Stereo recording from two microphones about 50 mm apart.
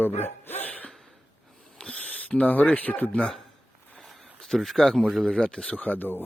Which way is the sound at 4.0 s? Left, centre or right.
Centre.